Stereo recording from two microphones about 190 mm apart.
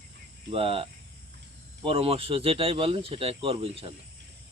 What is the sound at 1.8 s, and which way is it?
Speech, 30° right (ahead or behind).